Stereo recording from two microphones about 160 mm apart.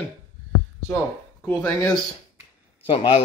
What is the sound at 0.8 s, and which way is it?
Speech, centre (ahead or behind).